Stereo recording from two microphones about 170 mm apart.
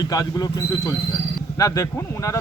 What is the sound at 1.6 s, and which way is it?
Speech, 20° left (ahead or behind).